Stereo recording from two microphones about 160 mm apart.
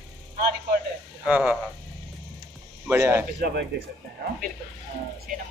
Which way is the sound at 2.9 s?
15° right (ahead or behind).